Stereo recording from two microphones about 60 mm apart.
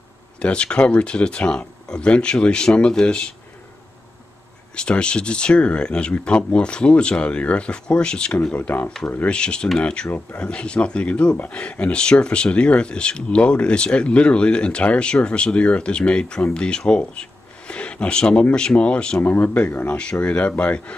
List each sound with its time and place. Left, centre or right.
0.4 s speech: centre
4.7 s speech: centre; by 9.3 s left
9.3 s speech: centre
10.0 s speech: left
19.2 s speech: left
20.0 s speech: centre